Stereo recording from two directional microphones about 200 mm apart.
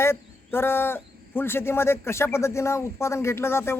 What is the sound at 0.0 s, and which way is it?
Speech, 10° left (ahead or behind).